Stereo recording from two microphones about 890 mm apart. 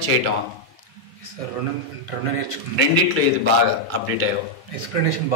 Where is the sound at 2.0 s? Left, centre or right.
Left.